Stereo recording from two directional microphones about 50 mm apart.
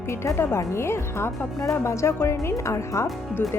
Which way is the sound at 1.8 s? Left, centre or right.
Left.